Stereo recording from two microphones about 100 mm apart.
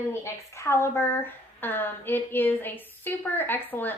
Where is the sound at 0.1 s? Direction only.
30° left (ahead or behind).